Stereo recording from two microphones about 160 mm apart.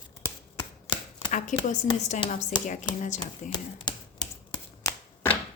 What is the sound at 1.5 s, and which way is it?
Speech, 50° left (ahead or behind).